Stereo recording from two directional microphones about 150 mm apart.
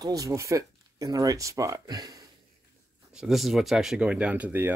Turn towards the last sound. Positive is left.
turn(degrees=-10)  # may be behind; listen again after turning